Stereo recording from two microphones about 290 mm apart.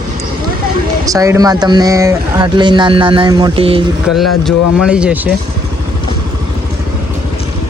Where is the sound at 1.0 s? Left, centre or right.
Centre.